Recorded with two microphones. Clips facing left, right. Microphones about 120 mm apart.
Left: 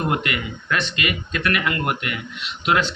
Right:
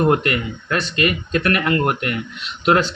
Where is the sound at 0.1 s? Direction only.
40° right (ahead or behind).